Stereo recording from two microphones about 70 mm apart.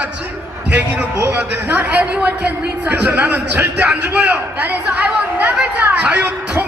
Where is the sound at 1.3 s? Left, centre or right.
Right.